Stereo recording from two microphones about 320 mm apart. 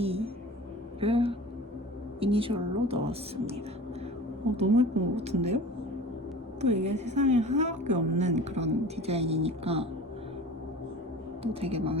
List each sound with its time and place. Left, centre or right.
0.0 s a sound: centre
2.2 s speech: centre
4.7 s speech: centre
6.6 s speech: right
11.6 s speech: centre